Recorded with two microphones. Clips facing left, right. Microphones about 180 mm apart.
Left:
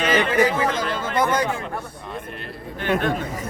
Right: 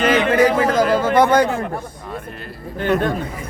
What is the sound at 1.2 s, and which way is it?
Speech, 65° right (ahead or behind).